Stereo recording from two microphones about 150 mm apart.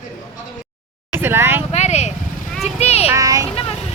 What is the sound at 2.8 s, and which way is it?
Child singing, 45° left (ahead or behind).